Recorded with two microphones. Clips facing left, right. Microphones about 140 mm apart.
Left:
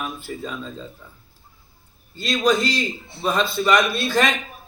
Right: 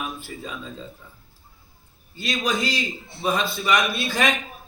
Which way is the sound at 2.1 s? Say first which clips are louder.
Left 6 dB; 10° right (ahead or behind).